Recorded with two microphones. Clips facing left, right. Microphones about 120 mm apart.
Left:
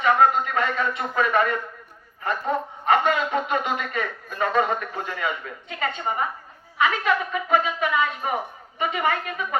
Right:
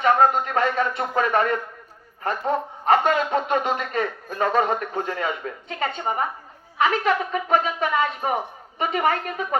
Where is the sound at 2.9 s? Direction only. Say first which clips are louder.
Right 2 dB; 35° right (ahead or behind).